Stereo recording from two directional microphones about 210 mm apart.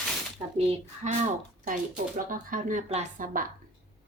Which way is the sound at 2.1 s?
40° right (ahead or behind).